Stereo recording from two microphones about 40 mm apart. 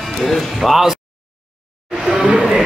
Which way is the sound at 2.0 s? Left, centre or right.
Centre.